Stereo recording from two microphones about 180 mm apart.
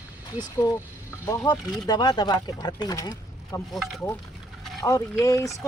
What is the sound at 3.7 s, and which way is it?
Speech, 5° left (ahead or behind).